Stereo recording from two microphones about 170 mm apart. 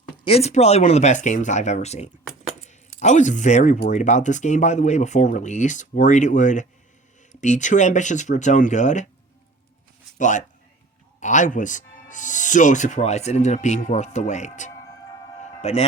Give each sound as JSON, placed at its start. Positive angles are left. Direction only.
{"t": 0.3, "sound": "speech", "side_deg": 35}
{"t": 10.2, "sound": "a man's voice", "side_deg": 45}
{"t": 15.4, "sound": "music", "side_deg": 40}